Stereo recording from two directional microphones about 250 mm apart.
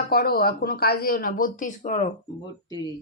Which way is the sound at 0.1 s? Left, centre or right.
Left.